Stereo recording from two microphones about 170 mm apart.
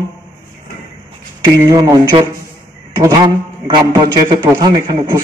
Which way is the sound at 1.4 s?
25° right (ahead or behind).